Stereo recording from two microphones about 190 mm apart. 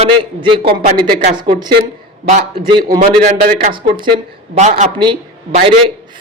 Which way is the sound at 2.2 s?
35° right (ahead or behind).